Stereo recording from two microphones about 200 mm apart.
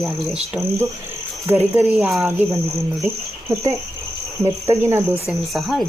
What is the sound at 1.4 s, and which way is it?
Speech, 10° right (ahead or behind).